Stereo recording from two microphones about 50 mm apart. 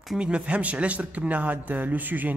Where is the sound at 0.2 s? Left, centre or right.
Right.